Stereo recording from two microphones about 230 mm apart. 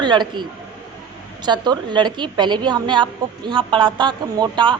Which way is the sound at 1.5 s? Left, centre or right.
Centre.